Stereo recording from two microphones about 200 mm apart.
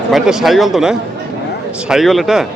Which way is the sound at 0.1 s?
Centre (ahead or behind).